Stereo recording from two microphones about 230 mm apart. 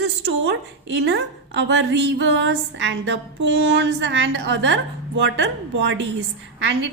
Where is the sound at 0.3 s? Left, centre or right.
Right.